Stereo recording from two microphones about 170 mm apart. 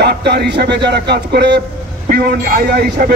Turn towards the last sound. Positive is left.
turn(degrees=-60)  # may be behind; listen again after turning